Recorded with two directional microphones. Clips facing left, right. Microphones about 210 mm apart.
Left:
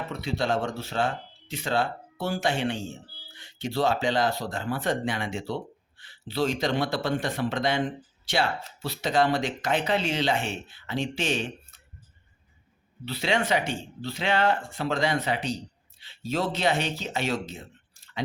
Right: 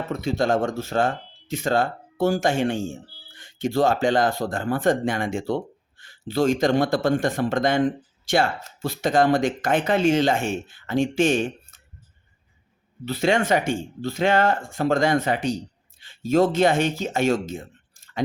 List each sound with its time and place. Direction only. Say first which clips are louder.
0.1 s speech: right 6 dB; 45° right (ahead or behind)
13.1 s speech: right 5 dB; 45° right (ahead or behind)